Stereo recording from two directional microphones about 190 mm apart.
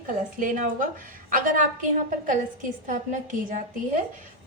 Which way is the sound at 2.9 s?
40° right (ahead or behind).